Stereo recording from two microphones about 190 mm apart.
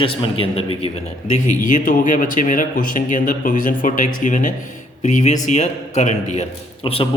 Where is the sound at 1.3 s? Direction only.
40° left (ahead or behind).